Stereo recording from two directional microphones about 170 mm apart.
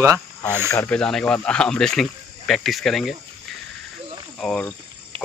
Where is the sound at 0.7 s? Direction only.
10° left (ahead or behind).